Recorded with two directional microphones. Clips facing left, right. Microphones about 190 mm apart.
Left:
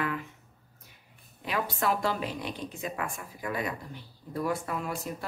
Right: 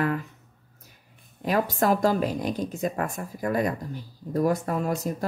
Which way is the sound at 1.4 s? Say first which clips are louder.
Right 6 dB; 40° right (ahead or behind).